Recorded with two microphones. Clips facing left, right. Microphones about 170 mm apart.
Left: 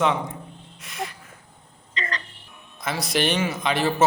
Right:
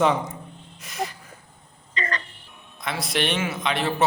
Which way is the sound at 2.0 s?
50° right (ahead or behind).